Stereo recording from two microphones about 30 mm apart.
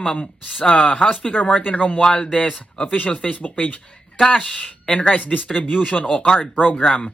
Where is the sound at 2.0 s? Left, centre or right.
Left.